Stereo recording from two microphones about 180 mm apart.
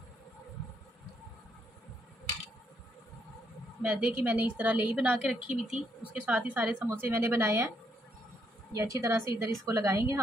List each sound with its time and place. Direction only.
3.8 s a woman's voice: 5° right (ahead or behind)
8.7 s a woman's voice: 20° right (ahead or behind)